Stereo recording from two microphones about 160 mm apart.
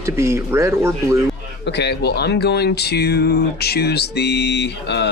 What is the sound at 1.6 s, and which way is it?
Speech, 90° left.